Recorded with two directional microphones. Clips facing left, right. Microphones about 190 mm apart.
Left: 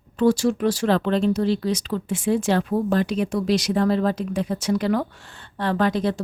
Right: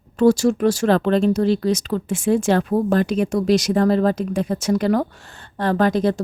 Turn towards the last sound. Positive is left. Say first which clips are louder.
# right 4 dB
turn(degrees=-45)  # may be behind; listen again after turning